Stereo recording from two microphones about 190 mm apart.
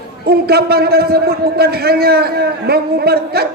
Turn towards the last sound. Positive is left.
turn(degrees=-55)  # may be behind; listen again after turning